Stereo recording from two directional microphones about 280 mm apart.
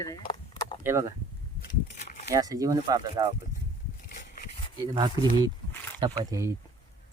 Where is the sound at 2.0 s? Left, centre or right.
Left.